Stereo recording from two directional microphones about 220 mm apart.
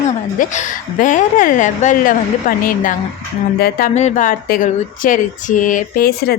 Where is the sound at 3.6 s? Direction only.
35° left (ahead or behind).